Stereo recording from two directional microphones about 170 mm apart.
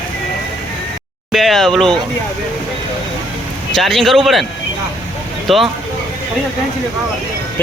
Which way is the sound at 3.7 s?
Centre (ahead or behind).